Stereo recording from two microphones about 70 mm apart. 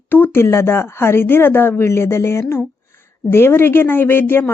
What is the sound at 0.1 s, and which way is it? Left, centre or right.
A woman's voice, left.